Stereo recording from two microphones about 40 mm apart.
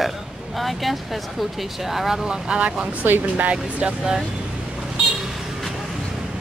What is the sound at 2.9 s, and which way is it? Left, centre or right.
Speech, right.